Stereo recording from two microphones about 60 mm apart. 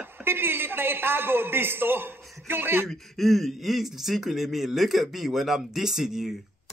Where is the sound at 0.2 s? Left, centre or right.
Right.